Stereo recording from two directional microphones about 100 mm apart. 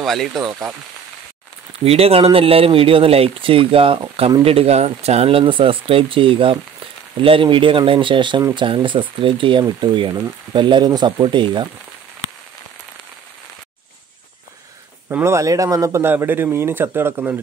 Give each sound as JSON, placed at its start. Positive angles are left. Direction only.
{"t": 0.0, "sound": "speech", "side_deg": 0}
{"t": 1.9, "sound": "speech", "side_deg": -80}
{"t": 15.0, "sound": "a man's voice", "side_deg": -25}